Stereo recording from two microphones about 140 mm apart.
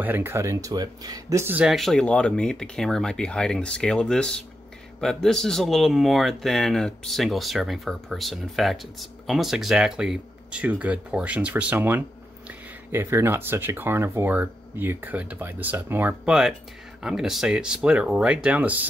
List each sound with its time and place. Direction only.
0.0 s speech: 15° right (ahead or behind)
1.4 s speech: 15° right (ahead or behind)
1.7 s speech: centre (ahead or behind)